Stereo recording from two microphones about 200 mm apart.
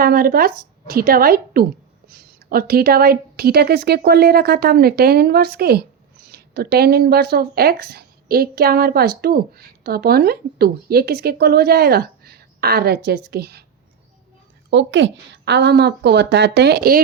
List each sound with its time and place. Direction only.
0.0 s a woman's voice: 45° right (ahead or behind)
14.7 s a woman's voice: 65° right (ahead or behind)